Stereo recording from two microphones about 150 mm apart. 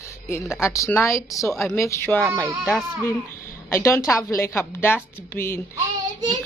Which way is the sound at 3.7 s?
20° left (ahead or behind).